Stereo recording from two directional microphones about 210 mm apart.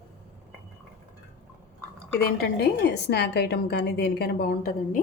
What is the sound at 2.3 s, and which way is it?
A woman's voice, 45° left (ahead or behind).